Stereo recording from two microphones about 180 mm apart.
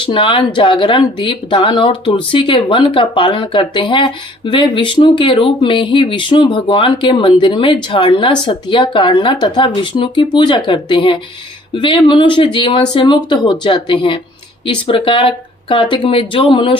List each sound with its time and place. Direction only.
0.0 s speech: 30° left (ahead or behind)